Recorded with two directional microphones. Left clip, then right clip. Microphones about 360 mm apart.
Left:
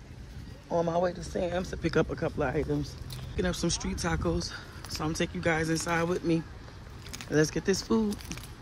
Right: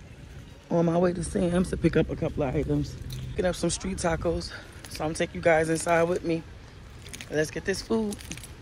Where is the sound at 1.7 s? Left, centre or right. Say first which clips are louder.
Right 7 dB; right.